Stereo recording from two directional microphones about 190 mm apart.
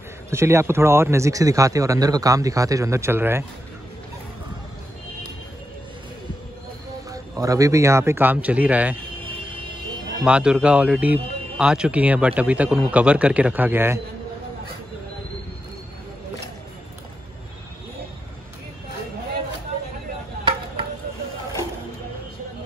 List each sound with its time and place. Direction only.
0.3 s speech: 15° right (ahead or behind)
7.1 s speech: 20° right (ahead or behind)
10.2 s speech: 5° right (ahead or behind)